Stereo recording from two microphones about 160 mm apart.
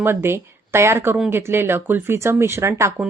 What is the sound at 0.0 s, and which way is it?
Speech, 15° right (ahead or behind).